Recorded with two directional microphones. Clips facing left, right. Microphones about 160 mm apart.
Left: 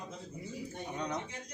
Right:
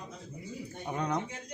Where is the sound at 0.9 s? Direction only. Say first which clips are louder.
Right 5 dB; 55° right (ahead or behind).